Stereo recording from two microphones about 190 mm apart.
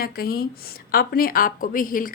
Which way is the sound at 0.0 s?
50° left (ahead or behind).